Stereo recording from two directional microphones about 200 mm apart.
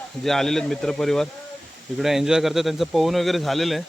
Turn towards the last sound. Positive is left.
turn(degrees=0)  # may be behind; listen again after turning